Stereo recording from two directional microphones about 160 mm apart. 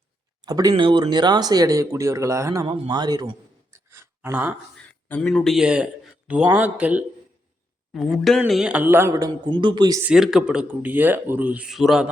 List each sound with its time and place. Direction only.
0.4 s speech: 25° right (ahead or behind)
2.7 s a sound: 25° right (ahead or behind)
5.0 s speech: 10° left (ahead or behind)
5.3 s speech: centre (ahead or behind); by 10.0 s 25° right (ahead or behind)
10.0 s speech: 5° right (ahead or behind)